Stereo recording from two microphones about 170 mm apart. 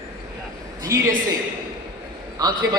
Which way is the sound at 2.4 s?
25° right (ahead or behind).